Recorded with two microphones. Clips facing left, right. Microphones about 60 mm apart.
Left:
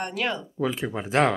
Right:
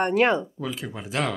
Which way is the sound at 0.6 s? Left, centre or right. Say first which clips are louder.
Left 5 dB; left.